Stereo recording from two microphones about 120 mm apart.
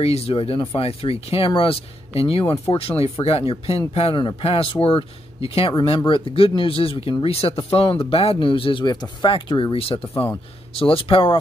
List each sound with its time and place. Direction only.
0.0 s speech: 55° left (ahead or behind)